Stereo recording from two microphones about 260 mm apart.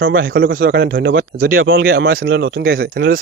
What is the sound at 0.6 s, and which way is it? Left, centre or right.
Speech, right.